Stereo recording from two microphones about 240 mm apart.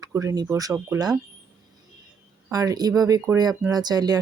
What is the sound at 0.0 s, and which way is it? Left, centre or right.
Speech, centre.